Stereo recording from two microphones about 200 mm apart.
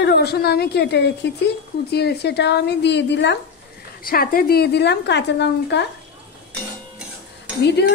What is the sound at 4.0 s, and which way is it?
A woman's voice, 45° left (ahead or behind).